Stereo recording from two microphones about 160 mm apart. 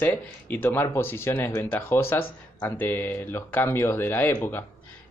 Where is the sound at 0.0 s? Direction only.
10° left (ahead or behind).